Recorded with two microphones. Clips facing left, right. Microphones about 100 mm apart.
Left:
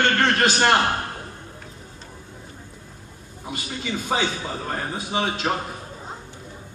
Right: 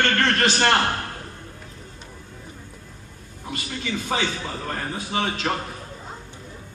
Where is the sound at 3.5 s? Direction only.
10° left (ahead or behind).